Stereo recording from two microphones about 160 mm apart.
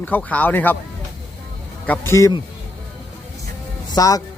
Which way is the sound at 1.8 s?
15° left (ahead or behind).